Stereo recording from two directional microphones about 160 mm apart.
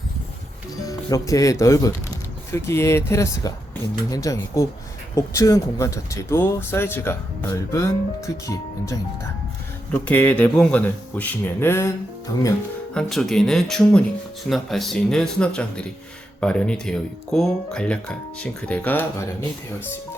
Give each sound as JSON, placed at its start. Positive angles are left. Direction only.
{"t": 0.9, "sound": "speech", "side_deg": 20}
{"t": 12.9, "sound": "speech", "side_deg": 5}